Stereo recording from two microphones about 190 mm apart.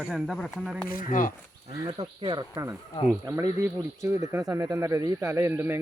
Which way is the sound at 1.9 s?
30° right (ahead or behind).